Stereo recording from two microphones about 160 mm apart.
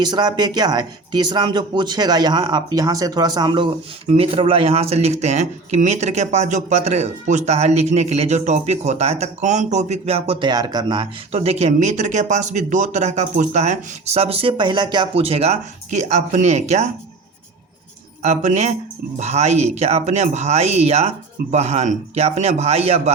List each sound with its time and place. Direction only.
0.0 s speech: 25° right (ahead or behind)
10.5 s speech: 25° right (ahead or behind)
11.3 s speech: 40° right (ahead or behind)
18.2 s speech: 45° right (ahead or behind)